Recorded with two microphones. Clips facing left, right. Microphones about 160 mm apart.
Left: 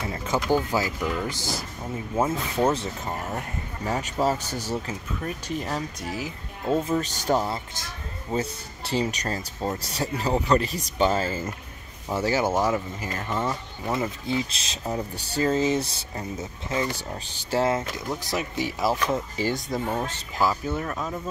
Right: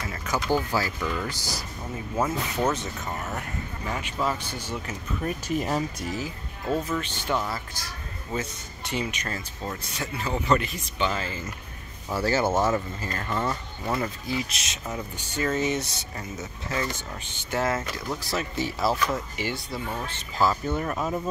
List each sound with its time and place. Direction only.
0.0 s a sound: 25° left (ahead or behind)
0.6 s speech: 15° left (ahead or behind); by 4.9 s 35° left (ahead or behind)
5.2 s speech: 10° right (ahead or behind)
6.2 s speech: 25° left (ahead or behind)
7.0 s speech: 40° left (ahead or behind)
7.4 s speech: 20° left (ahead or behind); by 11.5 s 40° left (ahead or behind)
12.1 s speech: 15° left (ahead or behind)
13.9 s speech: 20° left (ahead or behind)
16.9 s speech: 35° left (ahead or behind); by 18.9 s 15° left (ahead or behind)
18.9 s speech: 25° left (ahead or behind)
19.4 s speech: 45° left (ahead or behind)
20.3 s speech: 10° left (ahead or behind)
20.8 s speech: 10° right (ahead or behind)